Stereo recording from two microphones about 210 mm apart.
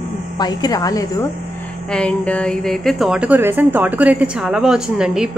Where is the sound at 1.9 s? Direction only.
5° left (ahead or behind).